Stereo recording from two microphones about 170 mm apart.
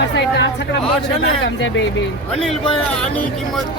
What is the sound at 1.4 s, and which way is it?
Speech, 90° left.